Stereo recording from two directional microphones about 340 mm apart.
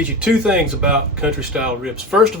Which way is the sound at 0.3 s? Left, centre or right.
Centre.